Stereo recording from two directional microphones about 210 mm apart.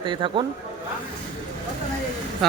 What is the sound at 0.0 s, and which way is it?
Speech, 25° right (ahead or behind).